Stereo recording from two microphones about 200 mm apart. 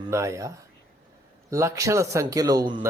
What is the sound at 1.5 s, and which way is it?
A man's voice, 15° right (ahead or behind).